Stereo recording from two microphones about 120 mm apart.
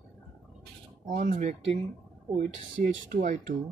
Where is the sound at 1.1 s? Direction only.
90° right.